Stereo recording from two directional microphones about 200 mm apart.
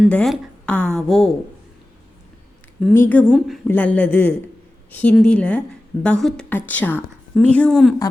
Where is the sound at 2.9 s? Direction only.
10° left (ahead or behind).